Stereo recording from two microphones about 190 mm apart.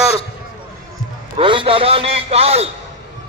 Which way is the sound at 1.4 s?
25° right (ahead or behind).